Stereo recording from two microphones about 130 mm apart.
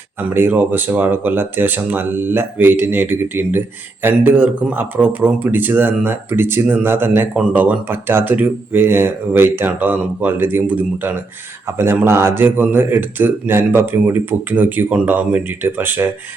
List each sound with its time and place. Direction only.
0.2 s speech: 15° right (ahead or behind)